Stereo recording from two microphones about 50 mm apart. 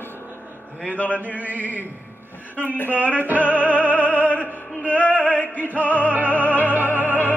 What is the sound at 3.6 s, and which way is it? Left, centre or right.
Music, left.